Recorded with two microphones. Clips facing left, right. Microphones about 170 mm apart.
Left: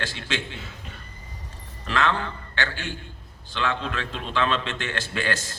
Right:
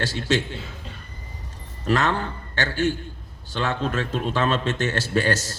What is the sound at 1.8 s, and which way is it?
A man's voice, 45° right (ahead or behind).